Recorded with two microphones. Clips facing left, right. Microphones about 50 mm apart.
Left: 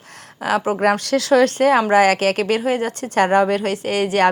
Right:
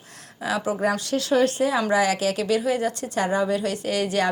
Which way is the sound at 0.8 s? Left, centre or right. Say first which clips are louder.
Left 6 dB; left.